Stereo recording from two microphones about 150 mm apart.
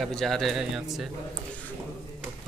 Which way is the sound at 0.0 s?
Centre (ahead or behind).